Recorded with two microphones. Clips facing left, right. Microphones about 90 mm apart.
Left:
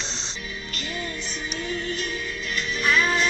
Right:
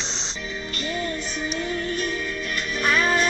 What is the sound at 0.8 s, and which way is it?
Music, 50° right (ahead or behind).